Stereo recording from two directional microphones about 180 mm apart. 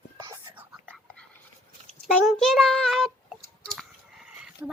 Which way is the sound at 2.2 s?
Centre (ahead or behind).